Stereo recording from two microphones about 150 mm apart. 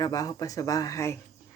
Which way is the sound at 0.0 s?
25° left (ahead or behind).